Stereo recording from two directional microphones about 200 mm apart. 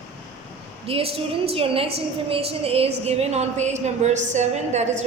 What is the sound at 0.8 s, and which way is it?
A woman's voice, 30° right (ahead or behind).